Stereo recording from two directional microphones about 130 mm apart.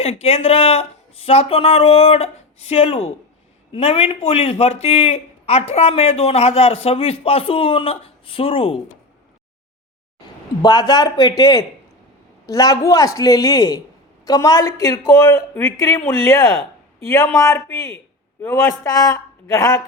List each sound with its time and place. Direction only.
0.0 s a man's voice: 50° left (ahead or behind)
10.6 s speech: 35° left (ahead or behind)